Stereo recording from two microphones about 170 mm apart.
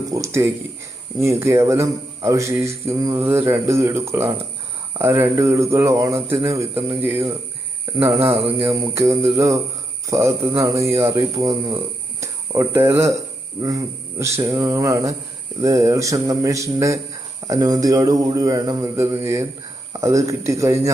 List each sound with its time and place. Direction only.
0.1 s speech: 15° right (ahead or behind)